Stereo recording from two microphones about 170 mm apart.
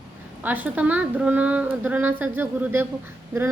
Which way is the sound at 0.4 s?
10° right (ahead or behind).